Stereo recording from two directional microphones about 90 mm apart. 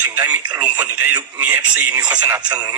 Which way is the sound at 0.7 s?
20° right (ahead or behind).